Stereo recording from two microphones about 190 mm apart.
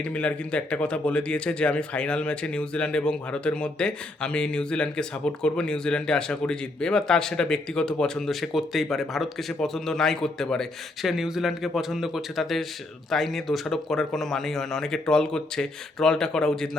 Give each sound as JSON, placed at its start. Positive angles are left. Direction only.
{"t": 0.0, "sound": "speech", "side_deg": 5}